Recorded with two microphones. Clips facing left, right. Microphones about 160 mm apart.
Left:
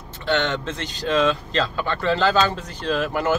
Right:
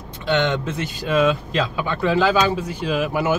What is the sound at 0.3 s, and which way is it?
A man's voice, 15° right (ahead or behind).